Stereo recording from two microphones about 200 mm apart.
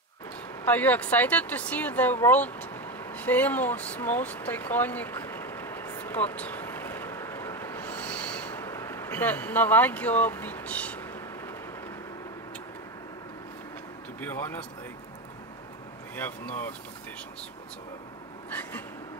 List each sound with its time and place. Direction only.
0.7 s a sound: 10° left (ahead or behind)
14.2 s speech: 10° left (ahead or behind)
16.2 s speech: 10° left (ahead or behind)
18.5 s speech: 10° left (ahead or behind)